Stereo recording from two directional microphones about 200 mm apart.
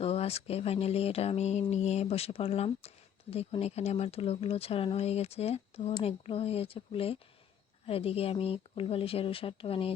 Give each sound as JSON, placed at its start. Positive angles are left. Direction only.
{"t": 0.0, "sound": "speech", "side_deg": 30}